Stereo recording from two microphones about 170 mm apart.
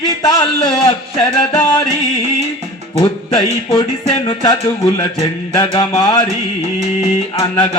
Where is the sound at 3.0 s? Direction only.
30° left (ahead or behind).